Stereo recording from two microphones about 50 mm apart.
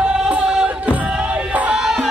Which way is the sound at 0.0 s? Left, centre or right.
Right.